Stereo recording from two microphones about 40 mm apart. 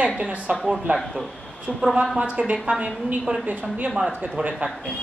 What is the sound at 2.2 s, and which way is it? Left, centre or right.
A woman's voice, right.